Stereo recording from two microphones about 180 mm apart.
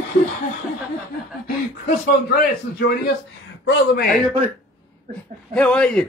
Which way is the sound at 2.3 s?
55° left (ahead or behind).